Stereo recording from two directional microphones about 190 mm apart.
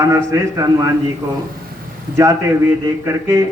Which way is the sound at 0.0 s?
15° right (ahead or behind).